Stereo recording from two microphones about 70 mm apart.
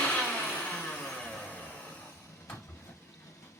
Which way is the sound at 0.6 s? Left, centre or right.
Left.